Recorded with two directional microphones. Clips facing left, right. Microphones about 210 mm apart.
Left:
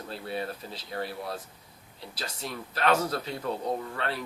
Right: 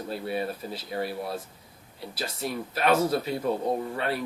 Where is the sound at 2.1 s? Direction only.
10° right (ahead or behind).